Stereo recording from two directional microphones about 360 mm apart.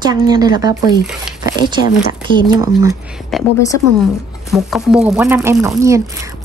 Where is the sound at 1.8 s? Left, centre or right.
Left.